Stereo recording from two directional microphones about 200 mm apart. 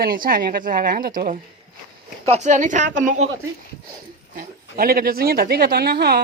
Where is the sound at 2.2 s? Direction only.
35° right (ahead or behind).